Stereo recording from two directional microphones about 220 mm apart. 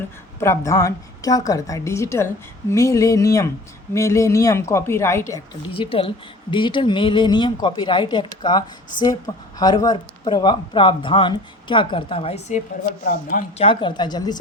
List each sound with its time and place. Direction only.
0.3 s a woman's voice: 10° left (ahead or behind)
5.7 s speech: 25° left (ahead or behind)
13.7 s speech: 20° left (ahead or behind)